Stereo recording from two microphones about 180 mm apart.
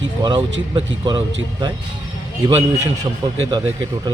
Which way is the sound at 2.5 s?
20° right (ahead or behind).